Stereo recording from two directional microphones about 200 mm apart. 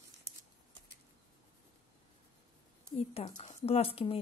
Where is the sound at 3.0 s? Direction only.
30° left (ahead or behind).